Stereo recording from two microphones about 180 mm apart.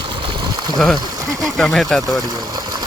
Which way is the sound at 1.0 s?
20° right (ahead or behind).